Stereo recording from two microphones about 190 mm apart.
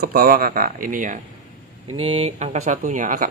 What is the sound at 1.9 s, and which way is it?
Speech, 30° right (ahead or behind).